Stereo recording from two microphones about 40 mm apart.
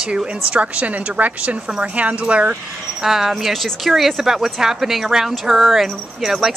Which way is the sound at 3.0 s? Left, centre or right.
Centre.